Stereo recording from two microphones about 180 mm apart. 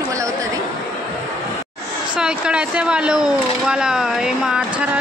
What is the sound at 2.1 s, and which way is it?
Speech, 5° right (ahead or behind).